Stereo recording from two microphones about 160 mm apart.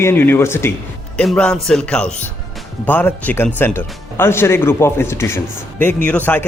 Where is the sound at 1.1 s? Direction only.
5° left (ahead or behind).